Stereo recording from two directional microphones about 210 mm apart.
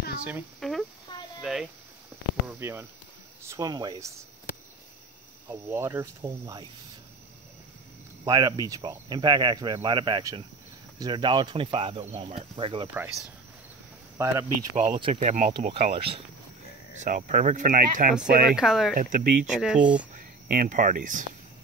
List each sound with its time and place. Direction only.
0.2 s speech: 5° right (ahead or behind)
1.1 s a sound: 20° left (ahead or behind)
1.4 s speech: centre (ahead or behind); by 4.1 s 20° right (ahead or behind)
5.5 s speech: 10° right (ahead or behind)
8.3 s speech: 20° right (ahead or behind)
12.9 s speech: 10° right (ahead or behind)
15.1 s speech: 35° right (ahead or behind)
17.0 s speech: 40° right (ahead or behind)
18.6 s speech: centre (ahead or behind)
18.9 s speech: 40° right (ahead or behind)
19.5 s speech: 5° right (ahead or behind)
20.4 s speech: 40° right (ahead or behind)